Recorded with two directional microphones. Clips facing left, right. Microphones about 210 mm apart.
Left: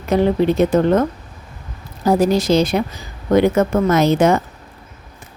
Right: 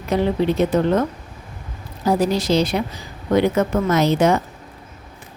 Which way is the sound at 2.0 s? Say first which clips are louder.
Left 4 dB; 45° left (ahead or behind).